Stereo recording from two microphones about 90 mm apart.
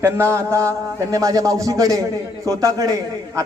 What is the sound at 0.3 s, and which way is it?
A man's voice, 35° right (ahead or behind).